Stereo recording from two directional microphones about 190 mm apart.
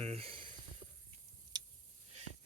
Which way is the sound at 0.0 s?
30° right (ahead or behind).